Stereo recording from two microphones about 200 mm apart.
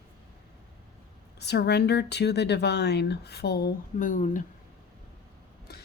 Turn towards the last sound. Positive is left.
turn(degrees=40)  # may be behind; listen again after turning